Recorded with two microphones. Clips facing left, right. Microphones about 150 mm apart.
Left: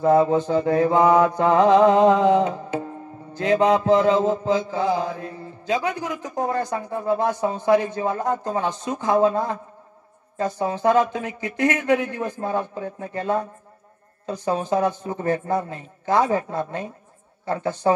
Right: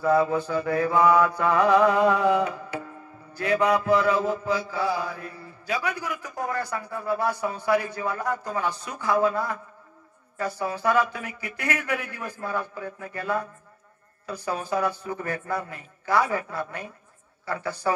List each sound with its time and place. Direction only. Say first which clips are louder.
0.0 s mantra: left 5 dB; 20° left (ahead or behind)